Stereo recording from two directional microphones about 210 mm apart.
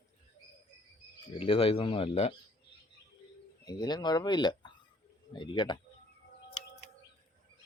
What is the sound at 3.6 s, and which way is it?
Speech, 20° left (ahead or behind).